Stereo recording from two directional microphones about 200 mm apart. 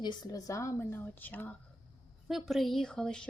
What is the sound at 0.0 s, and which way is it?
A woman's voice, 20° left (ahead or behind).